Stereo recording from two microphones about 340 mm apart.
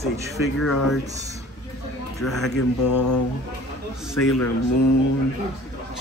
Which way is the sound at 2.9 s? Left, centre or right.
Left.